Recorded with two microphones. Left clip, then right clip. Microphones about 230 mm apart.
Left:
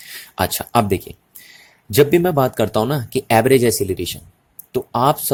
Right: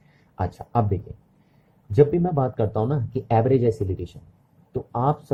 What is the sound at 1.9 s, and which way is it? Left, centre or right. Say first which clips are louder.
Speech: left 5 dB; left.